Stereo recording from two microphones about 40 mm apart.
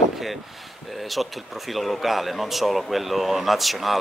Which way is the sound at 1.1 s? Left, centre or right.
Centre.